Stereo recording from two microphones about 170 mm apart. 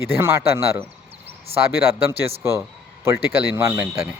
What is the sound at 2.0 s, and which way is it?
Speech, 15° right (ahead or behind).